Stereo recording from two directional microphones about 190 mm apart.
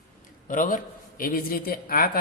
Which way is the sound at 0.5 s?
45° left (ahead or behind).